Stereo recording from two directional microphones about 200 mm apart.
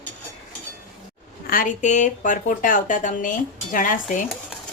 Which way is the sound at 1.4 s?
45° left (ahead or behind).